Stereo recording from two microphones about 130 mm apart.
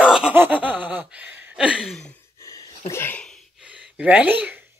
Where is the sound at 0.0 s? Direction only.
5° right (ahead or behind).